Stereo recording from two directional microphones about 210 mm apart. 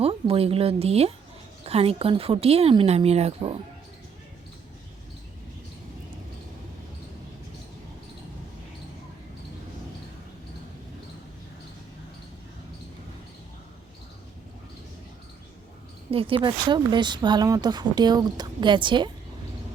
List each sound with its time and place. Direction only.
0.0 s speech: 25° right (ahead or behind)
16.1 s speech: 25° right (ahead or behind)